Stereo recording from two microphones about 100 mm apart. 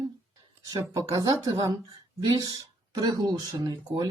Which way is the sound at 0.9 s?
35° right (ahead or behind).